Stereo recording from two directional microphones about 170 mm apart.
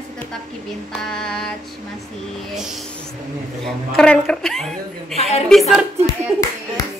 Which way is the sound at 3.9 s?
5° left (ahead or behind).